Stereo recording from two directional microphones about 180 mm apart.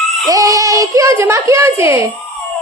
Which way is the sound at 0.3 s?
20° right (ahead or behind).